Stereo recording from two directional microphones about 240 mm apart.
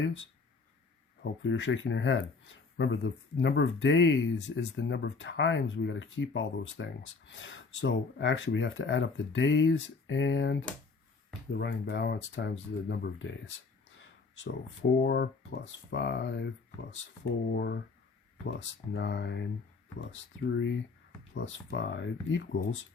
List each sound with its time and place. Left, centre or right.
1.2 s speech: left
14.3 s speech: left
18.9 s speech: left